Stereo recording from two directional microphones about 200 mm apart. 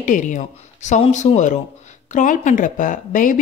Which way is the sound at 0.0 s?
40° left (ahead or behind).